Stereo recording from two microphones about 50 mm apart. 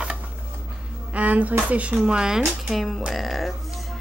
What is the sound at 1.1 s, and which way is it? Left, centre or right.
Speech, right.